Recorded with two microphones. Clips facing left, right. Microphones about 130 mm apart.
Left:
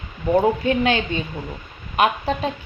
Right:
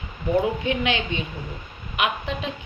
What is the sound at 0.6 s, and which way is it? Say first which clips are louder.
A woman's voice: left 5 dB; 45° left (ahead or behind).